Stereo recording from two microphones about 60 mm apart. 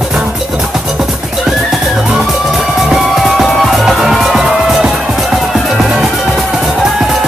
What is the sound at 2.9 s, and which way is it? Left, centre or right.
Music, centre.